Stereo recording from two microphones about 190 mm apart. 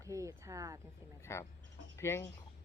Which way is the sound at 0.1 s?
15° right (ahead or behind).